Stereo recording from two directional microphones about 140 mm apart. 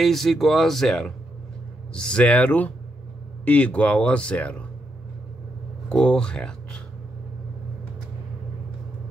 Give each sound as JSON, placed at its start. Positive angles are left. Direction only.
{"t": 0.0, "sound": "speech", "side_deg": 0}
{"t": 5.9, "sound": "speech", "side_deg": 5}